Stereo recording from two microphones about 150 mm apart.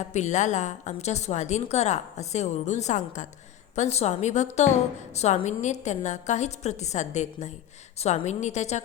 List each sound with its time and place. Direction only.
0.1 s a woman's voice: 50° left (ahead or behind)